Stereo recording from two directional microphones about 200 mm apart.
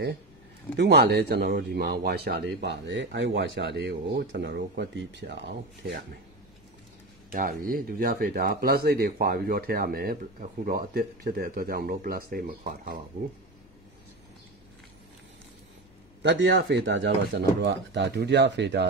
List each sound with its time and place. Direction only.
0.7 s speech: 55° right (ahead or behind)
7.3 s speech: 45° right (ahead or behind)
16.2 s speech: 60° right (ahead or behind)